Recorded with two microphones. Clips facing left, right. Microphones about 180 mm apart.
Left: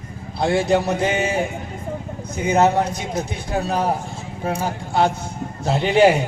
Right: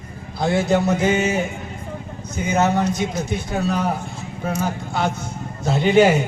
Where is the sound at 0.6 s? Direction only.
30° left (ahead or behind).